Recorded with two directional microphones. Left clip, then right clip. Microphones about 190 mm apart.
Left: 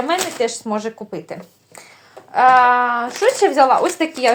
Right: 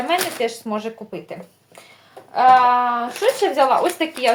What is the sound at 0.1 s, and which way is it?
A woman's voice, 35° left (ahead or behind).